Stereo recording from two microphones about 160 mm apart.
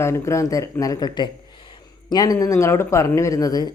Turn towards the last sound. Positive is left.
turn(degrees=20)  # may be behind; listen again after turning